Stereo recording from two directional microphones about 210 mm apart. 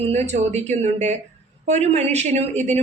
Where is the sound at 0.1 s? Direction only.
30° right (ahead or behind).